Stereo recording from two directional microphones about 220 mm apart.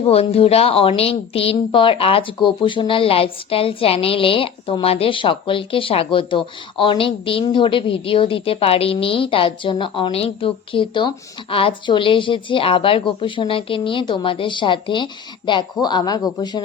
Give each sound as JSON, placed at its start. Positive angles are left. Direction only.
{"t": 0.1, "sound": "a woman's voice", "side_deg": 25}